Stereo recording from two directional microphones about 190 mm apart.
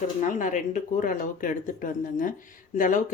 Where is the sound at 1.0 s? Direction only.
45° left (ahead or behind).